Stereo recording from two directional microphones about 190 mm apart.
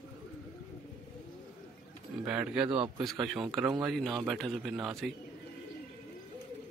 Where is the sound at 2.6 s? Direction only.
30° right (ahead or behind).